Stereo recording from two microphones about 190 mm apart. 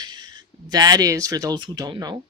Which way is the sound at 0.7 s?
20° right (ahead or behind).